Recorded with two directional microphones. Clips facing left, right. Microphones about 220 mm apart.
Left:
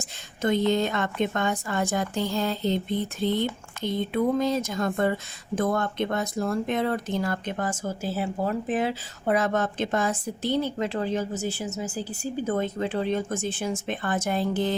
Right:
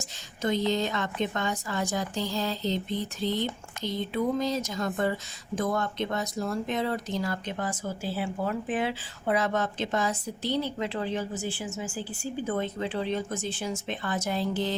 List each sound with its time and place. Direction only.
0.0 s a woman's voice: 55° left (ahead or behind)